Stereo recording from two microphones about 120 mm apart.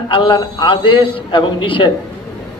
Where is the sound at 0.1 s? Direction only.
40° left (ahead or behind).